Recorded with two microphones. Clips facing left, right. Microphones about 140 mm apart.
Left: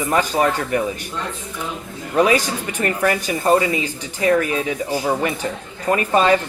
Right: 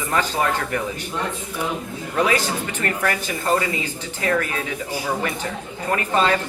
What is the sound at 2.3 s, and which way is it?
Speech, 15° left (ahead or behind).